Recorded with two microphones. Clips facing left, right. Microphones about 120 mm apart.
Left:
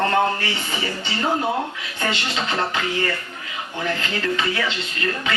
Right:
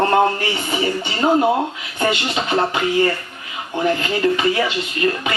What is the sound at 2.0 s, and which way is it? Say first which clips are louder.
Speech: right 5 dB; 20° right (ahead or behind).